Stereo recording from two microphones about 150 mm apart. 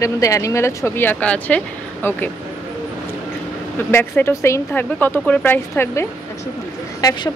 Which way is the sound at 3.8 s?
15° left (ahead or behind).